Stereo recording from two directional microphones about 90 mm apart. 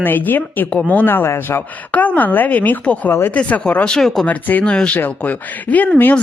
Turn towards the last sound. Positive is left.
turn(degrees=15)  # may be behind; listen again after turning